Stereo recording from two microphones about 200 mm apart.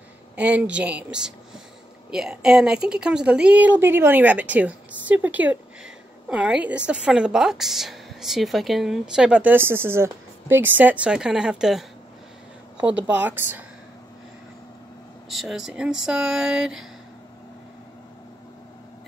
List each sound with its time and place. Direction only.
0.4 s a woman's voice: 5° right (ahead or behind)
12.8 s a woman's voice: 5° right (ahead or behind)
15.2 s a woman's voice: centre (ahead or behind)